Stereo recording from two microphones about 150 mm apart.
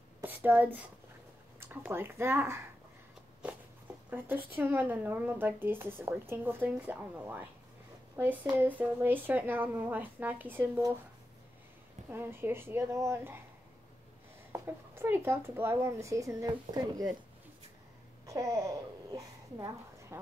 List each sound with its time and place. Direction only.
0.2 s a sound: 10° right (ahead or behind)
1.6 s speech: 15° right (ahead or behind)
4.1 s speech: 15° right (ahead or behind)
12.1 s speech: 15° right (ahead or behind)
14.5 s speech: 15° right (ahead or behind)
18.2 s babbling: 20° right (ahead or behind)
19.1 s a woman's voice: 20° right (ahead or behind)